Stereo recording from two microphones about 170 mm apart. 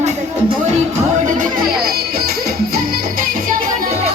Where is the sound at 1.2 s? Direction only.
50° right (ahead or behind).